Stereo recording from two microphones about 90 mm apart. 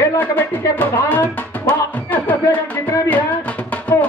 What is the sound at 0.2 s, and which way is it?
Speech, 25° left (ahead or behind).